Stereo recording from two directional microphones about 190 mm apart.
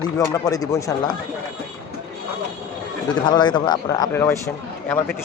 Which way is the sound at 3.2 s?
25° left (ahead or behind).